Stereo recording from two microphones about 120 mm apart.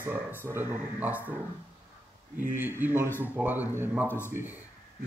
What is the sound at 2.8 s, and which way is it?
Speech, 15° right (ahead or behind).